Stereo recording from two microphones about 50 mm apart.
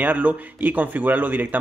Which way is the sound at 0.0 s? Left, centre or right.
Right.